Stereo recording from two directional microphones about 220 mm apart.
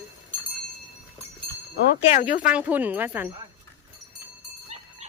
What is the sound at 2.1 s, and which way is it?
Speech, 35° left (ahead or behind).